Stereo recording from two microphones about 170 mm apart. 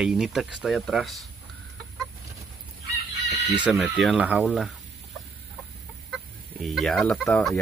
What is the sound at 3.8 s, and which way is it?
Speech, centre (ahead or behind).